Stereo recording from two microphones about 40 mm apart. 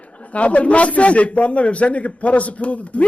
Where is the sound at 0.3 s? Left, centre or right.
Left.